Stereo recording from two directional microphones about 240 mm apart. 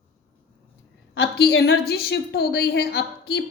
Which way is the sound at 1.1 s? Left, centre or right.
Left.